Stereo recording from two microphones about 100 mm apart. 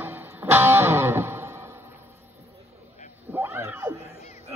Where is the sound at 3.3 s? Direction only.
25° right (ahead or behind).